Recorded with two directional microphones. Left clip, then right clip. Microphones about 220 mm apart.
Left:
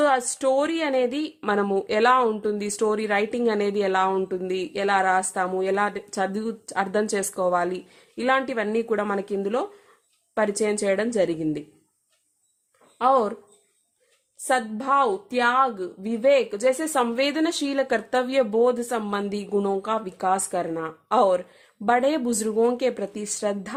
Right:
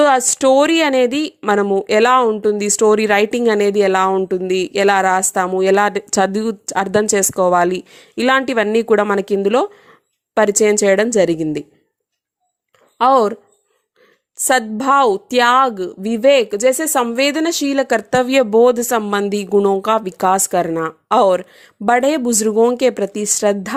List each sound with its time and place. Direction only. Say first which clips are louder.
0.0 s a woman's voice: right 9 dB; 30° right (ahead or behind)
13.0 s a woman's voice: right 8 dB; 35° right (ahead or behind)
14.4 s a woman's voice: right 9 dB; 35° right (ahead or behind)